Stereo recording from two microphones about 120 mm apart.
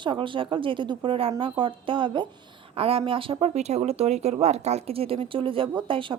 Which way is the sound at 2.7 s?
55° right (ahead or behind).